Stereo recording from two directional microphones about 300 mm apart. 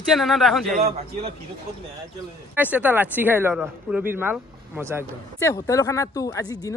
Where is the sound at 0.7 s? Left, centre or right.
Centre.